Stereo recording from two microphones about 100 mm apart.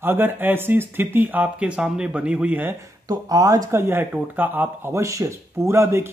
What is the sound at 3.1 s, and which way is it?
Speech, 35° right (ahead or behind).